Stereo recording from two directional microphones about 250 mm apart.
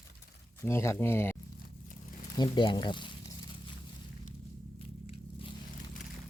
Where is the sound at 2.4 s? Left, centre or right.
Centre.